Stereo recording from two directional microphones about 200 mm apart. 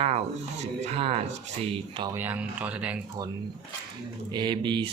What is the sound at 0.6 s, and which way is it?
Speech, 35° right (ahead or behind).